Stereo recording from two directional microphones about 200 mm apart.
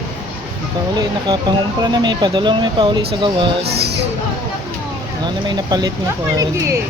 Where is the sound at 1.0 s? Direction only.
20° right (ahead or behind).